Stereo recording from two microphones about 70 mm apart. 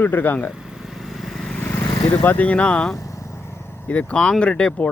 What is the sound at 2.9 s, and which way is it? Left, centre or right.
Vehicle, left.